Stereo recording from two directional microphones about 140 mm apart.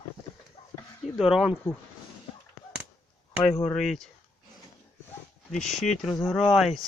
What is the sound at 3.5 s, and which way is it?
Speech, 45° left (ahead or behind).